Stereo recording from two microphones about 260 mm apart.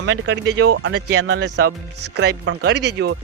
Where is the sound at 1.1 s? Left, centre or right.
Right.